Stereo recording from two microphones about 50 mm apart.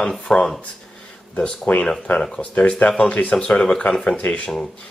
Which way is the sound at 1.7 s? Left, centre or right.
Left.